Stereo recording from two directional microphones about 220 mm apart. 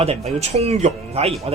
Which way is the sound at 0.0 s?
30° right (ahead or behind).